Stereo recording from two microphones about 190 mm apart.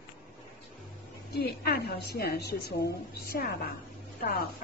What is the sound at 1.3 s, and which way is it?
A woman's voice, 55° left (ahead or behind).